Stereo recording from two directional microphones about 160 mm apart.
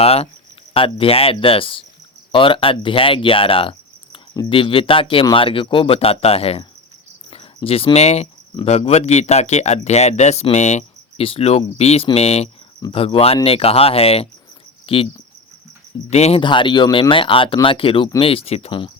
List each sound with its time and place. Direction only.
0.0 s speech: 40° left (ahead or behind)
16.0 s speech: 40° left (ahead or behind)
16.4 s speech: 30° left (ahead or behind)